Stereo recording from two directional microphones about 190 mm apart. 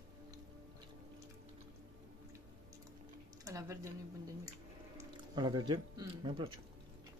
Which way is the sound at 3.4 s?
15° right (ahead or behind).